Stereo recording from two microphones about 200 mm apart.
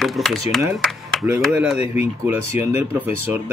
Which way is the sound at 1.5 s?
5° right (ahead or behind).